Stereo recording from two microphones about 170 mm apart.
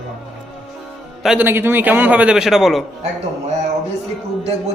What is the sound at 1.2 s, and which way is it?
A man's voice, 10° right (ahead or behind).